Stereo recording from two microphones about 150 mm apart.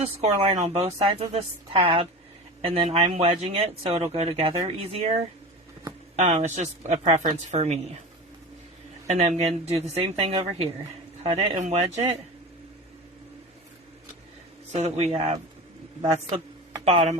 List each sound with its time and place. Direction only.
0.0 s a woman's voice: 40° right (ahead or behind)
6.1 s speech: 50° right (ahead or behind)
9.0 s a woman's voice: 45° right (ahead or behind)
14.7 s speech: 45° right (ahead or behind)
16.8 s speech: 50° right (ahead or behind)